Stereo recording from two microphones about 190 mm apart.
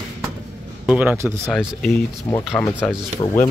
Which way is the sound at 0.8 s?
5° right (ahead or behind).